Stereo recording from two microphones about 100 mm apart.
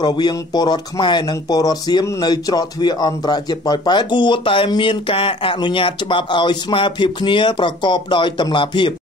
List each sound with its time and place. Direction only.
0.0 s speech: 45° left (ahead or behind)